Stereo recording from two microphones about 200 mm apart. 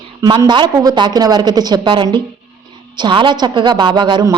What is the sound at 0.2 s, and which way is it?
A woman's voice, 25° right (ahead or behind).